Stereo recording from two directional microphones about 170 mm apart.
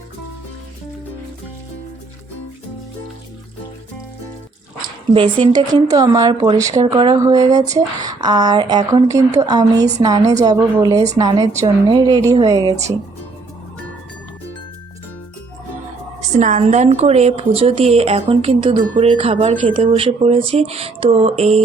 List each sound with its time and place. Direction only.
5.1 s speech: 30° right (ahead or behind)
10.9 s speech: 40° right (ahead or behind)
11.2 s speech: 25° right (ahead or behind)
16.4 s speech: 45° right (ahead or behind)